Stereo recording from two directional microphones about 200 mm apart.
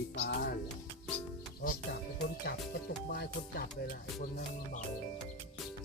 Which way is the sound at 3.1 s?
45° left (ahead or behind).